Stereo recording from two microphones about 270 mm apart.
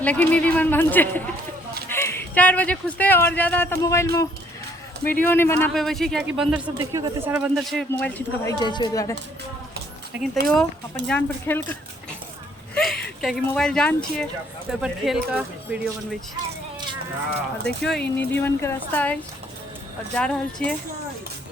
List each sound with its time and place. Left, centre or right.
0.0 s speech: centre
10.4 s speech: centre
17.7 s speech: centre